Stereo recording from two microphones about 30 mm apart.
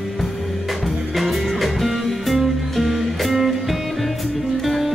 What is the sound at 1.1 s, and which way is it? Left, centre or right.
Music, centre.